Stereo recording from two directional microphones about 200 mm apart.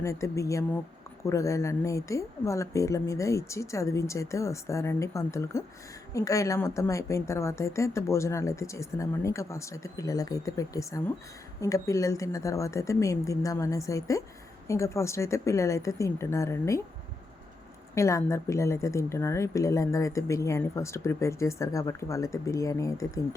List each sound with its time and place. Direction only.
0.0 s a woman's voice: 15° left (ahead or behind)
17.9 s a woman's voice: 15° left (ahead or behind)